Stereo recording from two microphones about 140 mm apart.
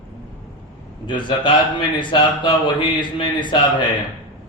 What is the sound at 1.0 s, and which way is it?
A man's voice, 35° left (ahead or behind).